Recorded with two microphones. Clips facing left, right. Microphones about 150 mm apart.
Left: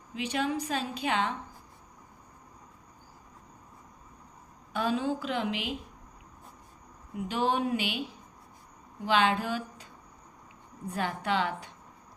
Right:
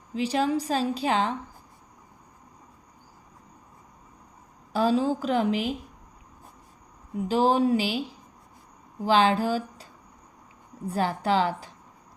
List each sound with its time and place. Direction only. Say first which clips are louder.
0.1 s a woman's voice: right 6 dB; 35° right (ahead or behind)
4.7 s a woman's voice: right 6 dB; 35° right (ahead or behind)
7.3 s a woman's voice: right 7 dB; 35° right (ahead or behind)
9.0 s a woman's voice: right 5 dB; 35° right (ahead or behind)
10.9 s a woman's voice: right 6 dB; 35° right (ahead or behind)